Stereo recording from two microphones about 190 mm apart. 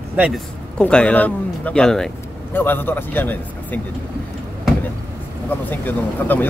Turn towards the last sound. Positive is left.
turn(degrees=10)  # may be behind; listen again after turning